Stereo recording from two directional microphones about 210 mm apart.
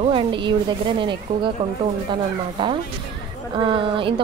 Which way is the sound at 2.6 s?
20° right (ahead or behind).